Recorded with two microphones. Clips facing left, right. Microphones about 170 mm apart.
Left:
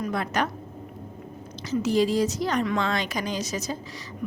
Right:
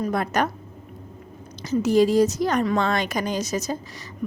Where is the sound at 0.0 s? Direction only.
45° right (ahead or behind).